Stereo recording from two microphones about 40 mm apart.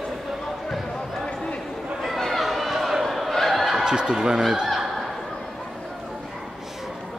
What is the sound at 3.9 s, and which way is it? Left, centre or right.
Speech, centre.